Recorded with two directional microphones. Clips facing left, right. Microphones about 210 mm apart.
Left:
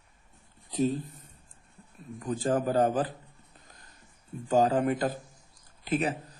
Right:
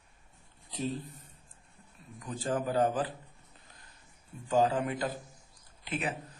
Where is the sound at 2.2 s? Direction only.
45° left (ahead or behind).